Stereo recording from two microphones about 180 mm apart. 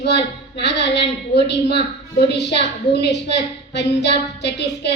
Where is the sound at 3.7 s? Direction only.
70° left (ahead or behind).